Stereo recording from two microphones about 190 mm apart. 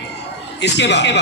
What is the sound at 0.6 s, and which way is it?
Speech, 65° left (ahead or behind).